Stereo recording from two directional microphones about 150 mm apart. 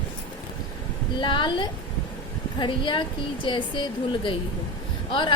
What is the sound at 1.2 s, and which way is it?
A woman's voice, 30° left (ahead or behind).